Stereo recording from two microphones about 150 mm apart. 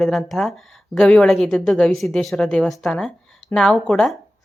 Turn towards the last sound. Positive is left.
turn(degrees=5)  # may be behind; listen again after turning